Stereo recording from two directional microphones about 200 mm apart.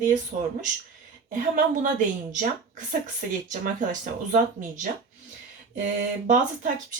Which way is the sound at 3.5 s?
40° right (ahead or behind).